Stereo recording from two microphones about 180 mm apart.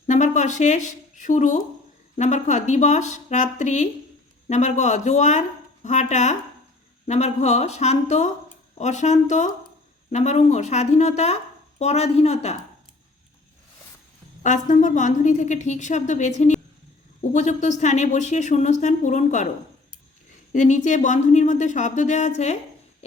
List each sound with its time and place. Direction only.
0.1 s speech: 40° left (ahead or behind)
14.4 s a woman's voice: 45° left (ahead or behind)
17.3 s speech: 40° left (ahead or behind)
20.5 s a woman's voice: 45° left (ahead or behind)